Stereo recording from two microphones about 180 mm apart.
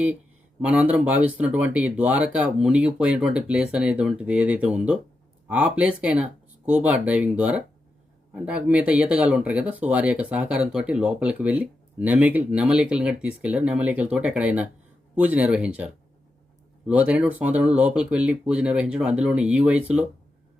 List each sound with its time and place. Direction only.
0.6 s speech: 5° right (ahead or behind)